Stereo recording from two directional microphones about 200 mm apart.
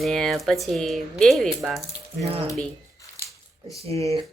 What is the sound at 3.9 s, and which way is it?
Speech, 15° left (ahead or behind).